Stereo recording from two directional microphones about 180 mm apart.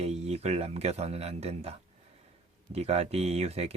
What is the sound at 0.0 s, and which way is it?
Speech, 35° right (ahead or behind).